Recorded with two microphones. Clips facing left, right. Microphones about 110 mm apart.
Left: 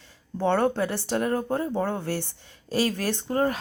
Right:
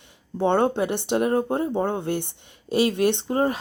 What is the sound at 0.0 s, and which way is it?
Speech, 20° right (ahead or behind).